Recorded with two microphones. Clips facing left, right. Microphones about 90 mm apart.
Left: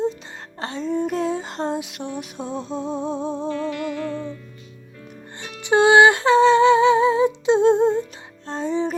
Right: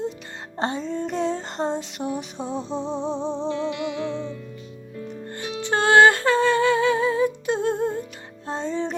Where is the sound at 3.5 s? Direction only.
25° right (ahead or behind).